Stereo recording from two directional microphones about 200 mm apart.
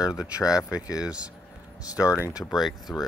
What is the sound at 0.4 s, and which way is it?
Speech, 15° left (ahead or behind).